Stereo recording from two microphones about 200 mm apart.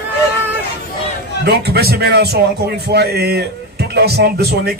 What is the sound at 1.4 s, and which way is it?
A man's voice, 55° right (ahead or behind).